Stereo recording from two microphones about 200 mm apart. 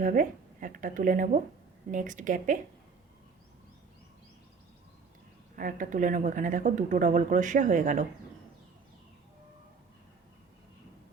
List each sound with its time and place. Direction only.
0.0 s speech: 40° right (ahead or behind)
5.5 s speech: 40° right (ahead or behind)